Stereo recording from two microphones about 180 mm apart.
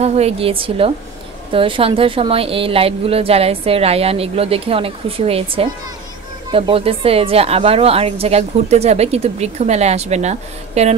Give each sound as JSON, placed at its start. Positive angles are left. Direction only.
{"t": 0.0, "sound": "a woman's voice", "side_deg": -35}